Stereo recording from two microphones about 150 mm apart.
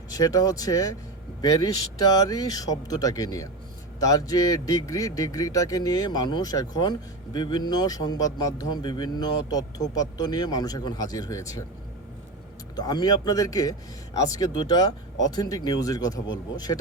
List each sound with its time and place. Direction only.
0.1 s speech: 25° left (ahead or behind)
12.7 s speech: 25° left (ahead or behind)